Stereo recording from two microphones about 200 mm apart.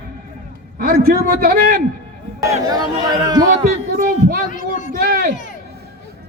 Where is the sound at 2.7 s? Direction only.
20° right (ahead or behind).